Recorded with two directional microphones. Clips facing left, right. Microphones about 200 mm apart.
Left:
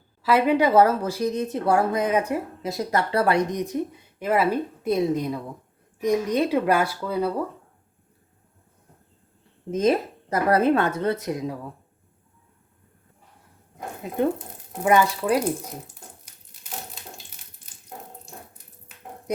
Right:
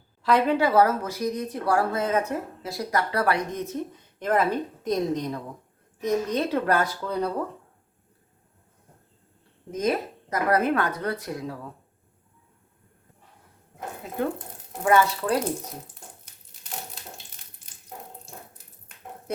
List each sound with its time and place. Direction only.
0.2 s speech: 5° left (ahead or behind)
9.7 s speech: 30° left (ahead or behind)
14.8 s speech: 15° left (ahead or behind)
16.2 s crumpling: 5° left (ahead or behind)
18.9 s a sound: 5° left (ahead or behind)